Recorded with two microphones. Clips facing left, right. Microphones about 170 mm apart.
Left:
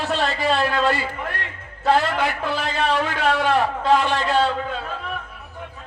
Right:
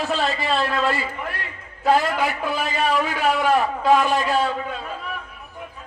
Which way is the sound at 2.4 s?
70° left (ahead or behind).